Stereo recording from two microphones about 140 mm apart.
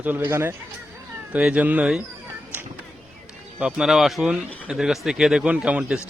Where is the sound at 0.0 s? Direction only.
15° right (ahead or behind).